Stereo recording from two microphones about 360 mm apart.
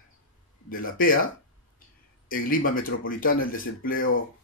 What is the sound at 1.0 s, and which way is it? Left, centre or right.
Speech, left.